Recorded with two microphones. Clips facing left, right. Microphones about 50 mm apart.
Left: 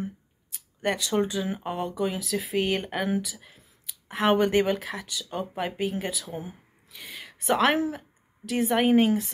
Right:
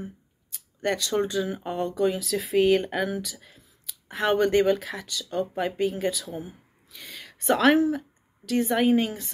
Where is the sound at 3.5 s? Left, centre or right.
Left.